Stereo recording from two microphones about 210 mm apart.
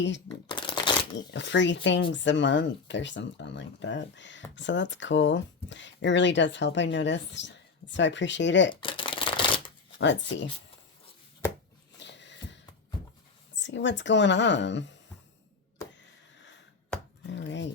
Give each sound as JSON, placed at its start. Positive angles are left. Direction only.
{"t": 0.4, "sound": "shuffling cards", "side_deg": 20}
{"t": 1.3, "sound": "speech", "side_deg": 60}
{"t": 8.7, "sound": "shuffling cards", "side_deg": 25}
{"t": 10.0, "sound": "speech", "side_deg": 60}
{"t": 11.9, "sound": "a sound", "side_deg": 55}
{"t": 13.6, "sound": "speech", "side_deg": 60}
{"t": 17.2, "sound": "chopping", "side_deg": 60}